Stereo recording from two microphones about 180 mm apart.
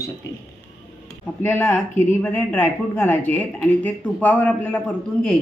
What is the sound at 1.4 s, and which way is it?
Speech, 10° left (ahead or behind).